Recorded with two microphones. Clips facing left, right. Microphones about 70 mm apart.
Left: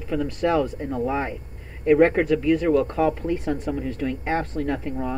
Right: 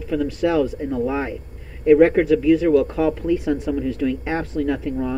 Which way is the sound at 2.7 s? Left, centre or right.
Left.